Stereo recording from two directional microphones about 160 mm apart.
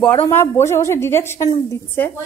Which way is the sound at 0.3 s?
15° left (ahead or behind).